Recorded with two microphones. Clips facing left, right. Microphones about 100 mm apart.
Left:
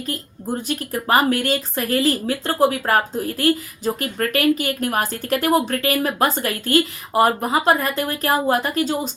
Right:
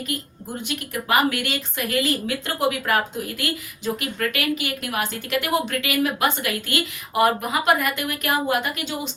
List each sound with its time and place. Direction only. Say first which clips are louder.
0.7 s speech: left 3 dB; 35° left (ahead or behind)